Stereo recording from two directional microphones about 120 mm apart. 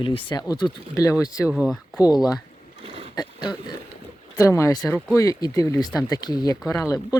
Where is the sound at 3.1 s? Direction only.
35° left (ahead or behind).